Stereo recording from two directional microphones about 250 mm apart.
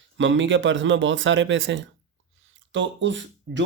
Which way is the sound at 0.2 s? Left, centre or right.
Right.